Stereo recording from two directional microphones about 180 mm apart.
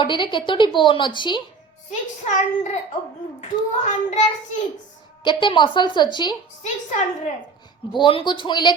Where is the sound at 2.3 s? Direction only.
40° left (ahead or behind).